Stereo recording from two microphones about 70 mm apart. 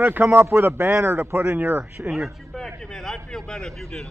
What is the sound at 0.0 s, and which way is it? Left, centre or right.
A man's voice, right.